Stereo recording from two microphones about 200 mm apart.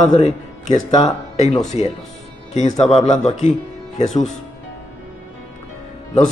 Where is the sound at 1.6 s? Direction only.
35° left (ahead or behind).